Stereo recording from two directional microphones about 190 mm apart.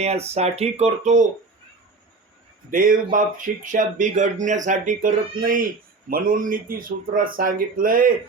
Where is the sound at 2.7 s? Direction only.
45° right (ahead or behind).